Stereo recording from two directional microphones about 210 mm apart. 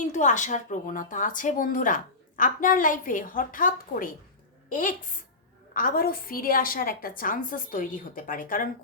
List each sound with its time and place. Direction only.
0.0 s a woman's voice: 35° left (ahead or behind)